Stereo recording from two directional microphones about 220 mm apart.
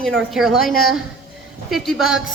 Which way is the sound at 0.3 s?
Centre (ahead or behind).